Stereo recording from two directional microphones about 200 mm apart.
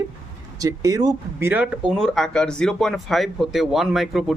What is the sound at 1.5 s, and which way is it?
Speech, 5° right (ahead or behind).